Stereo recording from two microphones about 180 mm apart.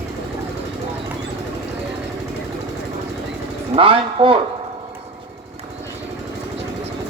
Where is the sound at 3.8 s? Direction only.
30° right (ahead or behind).